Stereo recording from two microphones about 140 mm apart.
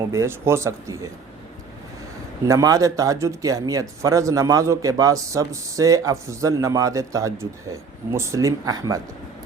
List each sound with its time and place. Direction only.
0.1 s speech: 20° right (ahead or behind)
2.5 s speech: 25° right (ahead or behind)